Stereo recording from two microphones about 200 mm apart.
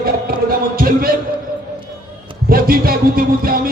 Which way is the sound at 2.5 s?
45° right (ahead or behind).